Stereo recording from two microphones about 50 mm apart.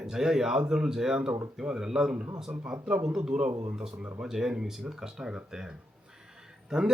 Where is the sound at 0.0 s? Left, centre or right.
Centre.